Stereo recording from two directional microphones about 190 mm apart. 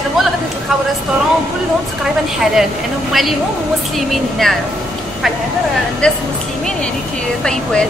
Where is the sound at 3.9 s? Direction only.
Centre (ahead or behind).